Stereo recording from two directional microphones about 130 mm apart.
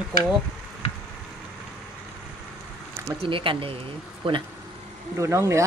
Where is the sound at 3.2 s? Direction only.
40° right (ahead or behind).